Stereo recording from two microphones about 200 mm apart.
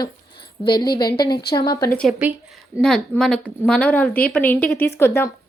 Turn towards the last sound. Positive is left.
turn(degrees=10)  # may be behind; listen again after turning